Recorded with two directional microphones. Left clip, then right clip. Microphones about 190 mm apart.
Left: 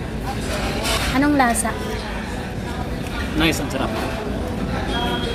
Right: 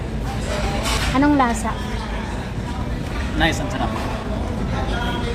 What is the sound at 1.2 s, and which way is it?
Speech, centre (ahead or behind).